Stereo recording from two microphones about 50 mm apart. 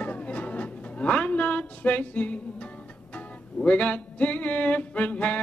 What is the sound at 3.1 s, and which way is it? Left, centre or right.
Music, left.